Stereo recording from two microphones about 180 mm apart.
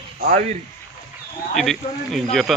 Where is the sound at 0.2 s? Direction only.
45° right (ahead or behind).